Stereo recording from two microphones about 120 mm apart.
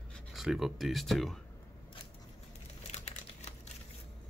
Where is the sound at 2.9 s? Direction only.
70° left (ahead or behind).